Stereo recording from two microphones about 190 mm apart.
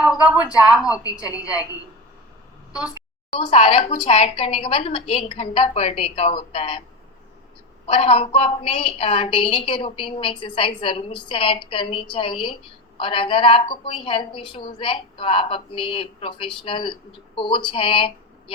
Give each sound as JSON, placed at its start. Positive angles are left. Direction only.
{"t": 0.0, "sound": "a sound", "side_deg": -5}
{"t": 0.6, "sound": "a woman's voice", "side_deg": -5}
{"t": 3.3, "sound": "a woman's voice", "side_deg": 35}
{"t": 7.9, "sound": "a woman's voice", "side_deg": 30}